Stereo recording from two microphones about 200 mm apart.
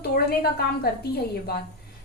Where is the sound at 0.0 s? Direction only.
50° left (ahead or behind).